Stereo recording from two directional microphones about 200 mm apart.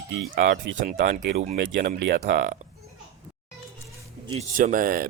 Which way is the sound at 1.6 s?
65° right (ahead or behind).